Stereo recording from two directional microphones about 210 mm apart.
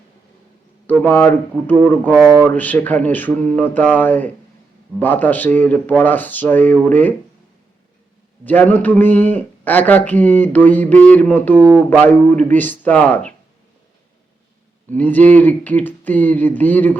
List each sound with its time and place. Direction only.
1.1 s a man's voice: 5° left (ahead or behind)
8.4 s a man's voice: 10° left (ahead or behind)
11.6 s speech: 10° right (ahead or behind)
11.9 s a man's voice: 5° left (ahead or behind)
14.8 s a man's voice: 10° left (ahead or behind)